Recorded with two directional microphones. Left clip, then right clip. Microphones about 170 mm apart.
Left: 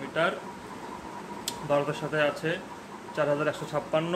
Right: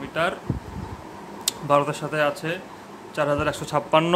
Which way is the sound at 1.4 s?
40° right (ahead or behind).